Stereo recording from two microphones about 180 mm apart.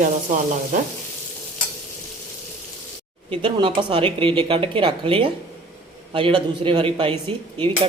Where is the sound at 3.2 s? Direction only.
30° right (ahead or behind).